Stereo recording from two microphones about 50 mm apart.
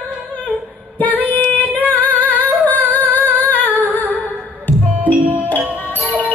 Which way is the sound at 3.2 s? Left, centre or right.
Left.